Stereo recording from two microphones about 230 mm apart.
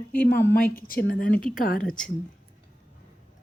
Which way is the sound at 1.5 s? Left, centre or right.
Left.